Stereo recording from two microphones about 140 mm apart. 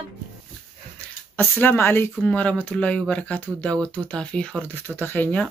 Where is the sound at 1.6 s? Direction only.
15° left (ahead or behind).